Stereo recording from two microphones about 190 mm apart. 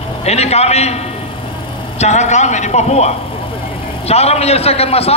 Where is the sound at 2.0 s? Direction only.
35° left (ahead or behind).